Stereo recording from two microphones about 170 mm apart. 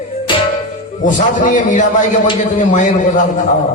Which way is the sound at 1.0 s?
50° left (ahead or behind).